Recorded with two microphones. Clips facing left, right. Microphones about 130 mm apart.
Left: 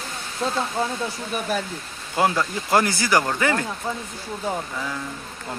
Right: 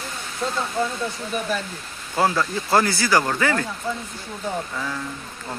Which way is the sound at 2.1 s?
15° left (ahead or behind).